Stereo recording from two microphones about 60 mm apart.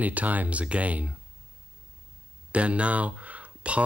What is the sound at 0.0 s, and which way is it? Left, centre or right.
Speech, right.